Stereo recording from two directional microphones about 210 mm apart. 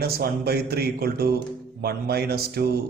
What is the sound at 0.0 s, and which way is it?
Speech, 50° right (ahead or behind).